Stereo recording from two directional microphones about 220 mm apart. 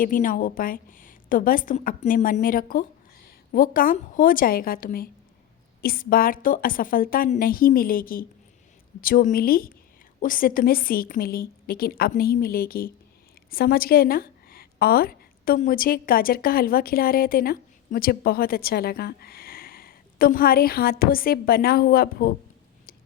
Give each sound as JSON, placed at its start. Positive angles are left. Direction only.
{"t": 0.0, "sound": "a woman's voice", "side_deg": 40}